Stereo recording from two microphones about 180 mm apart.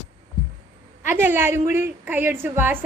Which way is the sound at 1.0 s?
10° right (ahead or behind).